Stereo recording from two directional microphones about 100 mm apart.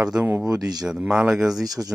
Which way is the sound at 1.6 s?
40° right (ahead or behind).